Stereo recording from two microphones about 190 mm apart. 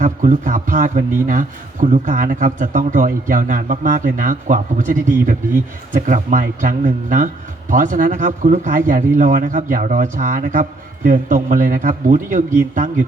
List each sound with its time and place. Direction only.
0.0 s a man's voice: 45° right (ahead or behind)